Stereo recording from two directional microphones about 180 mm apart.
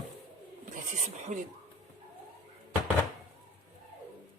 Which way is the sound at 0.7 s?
45° right (ahead or behind).